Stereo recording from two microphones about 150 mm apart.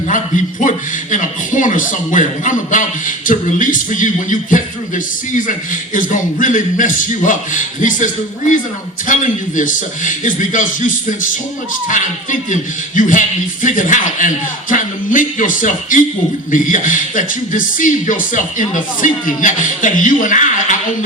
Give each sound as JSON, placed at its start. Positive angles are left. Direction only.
{"t": 1.1, "sound": "speech", "side_deg": 60}